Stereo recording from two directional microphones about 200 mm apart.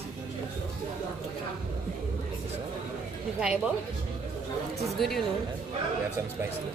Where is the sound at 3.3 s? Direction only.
5° right (ahead or behind).